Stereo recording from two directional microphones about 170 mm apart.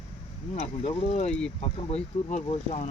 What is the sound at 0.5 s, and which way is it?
Speech, 40° left (ahead or behind).